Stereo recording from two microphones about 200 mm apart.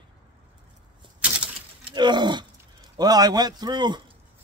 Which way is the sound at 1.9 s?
20° right (ahead or behind).